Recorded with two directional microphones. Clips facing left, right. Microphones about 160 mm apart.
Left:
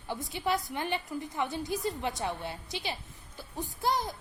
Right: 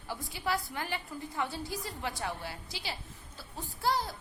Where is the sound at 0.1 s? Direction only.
20° left (ahead or behind).